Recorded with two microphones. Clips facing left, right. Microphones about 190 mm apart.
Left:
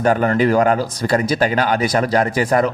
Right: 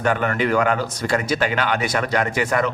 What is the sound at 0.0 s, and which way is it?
Speech, 35° left (ahead or behind).